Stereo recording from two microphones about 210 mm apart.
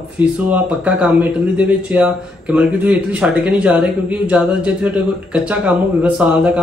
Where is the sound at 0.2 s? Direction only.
5° right (ahead or behind).